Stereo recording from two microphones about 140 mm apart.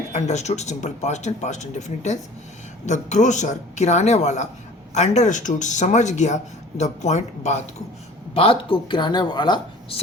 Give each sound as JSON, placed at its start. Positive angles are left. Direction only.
{"t": 0.1, "sound": "speech", "side_deg": 55}
{"t": 8.3, "sound": "speech", "side_deg": 40}